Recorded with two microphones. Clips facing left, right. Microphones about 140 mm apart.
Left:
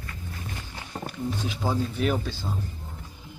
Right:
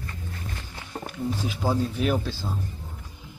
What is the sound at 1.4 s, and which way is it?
A man's voice, 5° right (ahead or behind).